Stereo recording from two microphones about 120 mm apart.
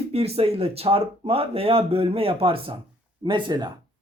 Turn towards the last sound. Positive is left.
turn(degrees=-40)  # may be behind; listen again after turning